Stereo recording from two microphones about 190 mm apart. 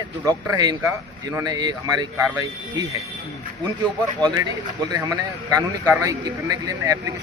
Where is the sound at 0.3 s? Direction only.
20° right (ahead or behind).